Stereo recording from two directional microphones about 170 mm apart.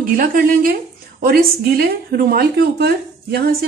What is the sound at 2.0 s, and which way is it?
Speech, 65° right (ahead or behind).